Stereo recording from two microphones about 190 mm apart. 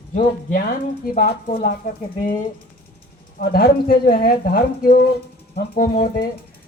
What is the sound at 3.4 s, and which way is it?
Speech, 50° left (ahead or behind).